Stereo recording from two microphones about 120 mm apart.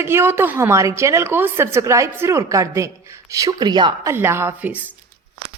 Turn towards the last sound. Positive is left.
turn(degrees=-15)  # may be behind; listen again after turning